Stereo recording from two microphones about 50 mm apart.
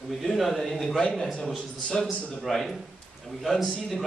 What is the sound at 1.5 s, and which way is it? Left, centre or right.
Speech, centre.